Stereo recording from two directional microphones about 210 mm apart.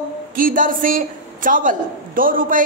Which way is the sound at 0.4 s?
40° right (ahead or behind).